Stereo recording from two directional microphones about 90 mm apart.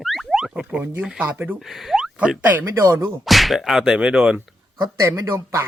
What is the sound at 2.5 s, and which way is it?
Speech, 20° right (ahead or behind).